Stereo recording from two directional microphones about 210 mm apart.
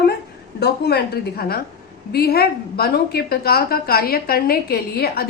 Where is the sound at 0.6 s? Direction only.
50° left (ahead or behind).